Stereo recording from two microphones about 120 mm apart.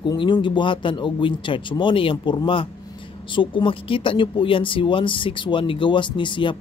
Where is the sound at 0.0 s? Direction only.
40° left (ahead or behind).